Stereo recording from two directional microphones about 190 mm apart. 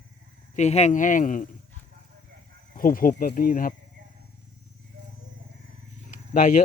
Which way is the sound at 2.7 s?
45° left (ahead or behind).